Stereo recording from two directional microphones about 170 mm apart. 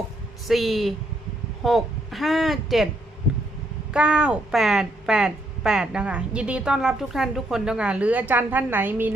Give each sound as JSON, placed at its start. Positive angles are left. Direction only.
{"t": 0.4, "sound": "a woman's voice", "side_deg": 0}
{"t": 3.9, "sound": "a woman's voice", "side_deg": -5}